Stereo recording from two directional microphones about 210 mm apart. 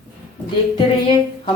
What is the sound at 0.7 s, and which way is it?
Speech, 25° left (ahead or behind).